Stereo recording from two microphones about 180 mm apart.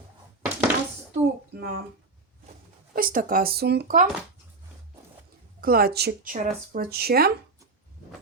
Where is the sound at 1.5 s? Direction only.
60° right (ahead or behind).